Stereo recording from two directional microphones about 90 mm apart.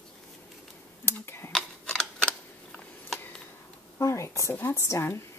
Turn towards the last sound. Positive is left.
turn(degrees=30)  # may be behind; listen again after turning